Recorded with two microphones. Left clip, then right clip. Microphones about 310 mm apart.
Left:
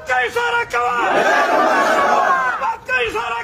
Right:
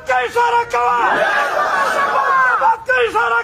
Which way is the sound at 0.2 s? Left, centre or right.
Centre.